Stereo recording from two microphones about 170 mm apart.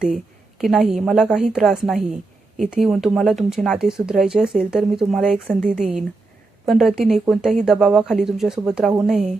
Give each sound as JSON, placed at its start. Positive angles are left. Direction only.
{"t": 0.6, "sound": "speech", "side_deg": 0}